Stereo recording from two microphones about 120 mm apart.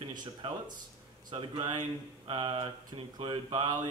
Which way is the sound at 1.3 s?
35° right (ahead or behind).